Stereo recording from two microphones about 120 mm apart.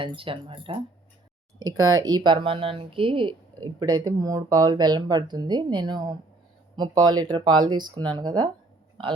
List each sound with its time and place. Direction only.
0.0 s speech: 45° right (ahead or behind)
1.5 s speech: 30° right (ahead or behind)